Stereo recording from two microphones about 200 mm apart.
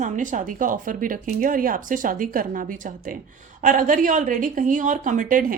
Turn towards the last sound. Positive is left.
turn(degrees=-45)  # may be behind; listen again after turning